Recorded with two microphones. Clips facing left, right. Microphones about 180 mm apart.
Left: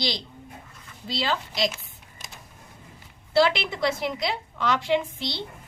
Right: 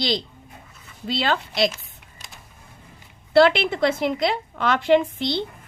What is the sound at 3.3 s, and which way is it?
A woman's voice, 60° right (ahead or behind).